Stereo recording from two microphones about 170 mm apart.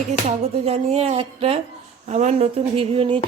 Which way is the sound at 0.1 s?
40° right (ahead or behind).